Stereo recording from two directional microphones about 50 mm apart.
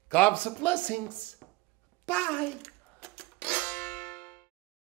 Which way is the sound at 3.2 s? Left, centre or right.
Left.